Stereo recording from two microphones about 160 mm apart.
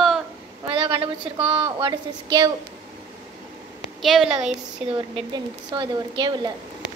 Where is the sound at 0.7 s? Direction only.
35° right (ahead or behind).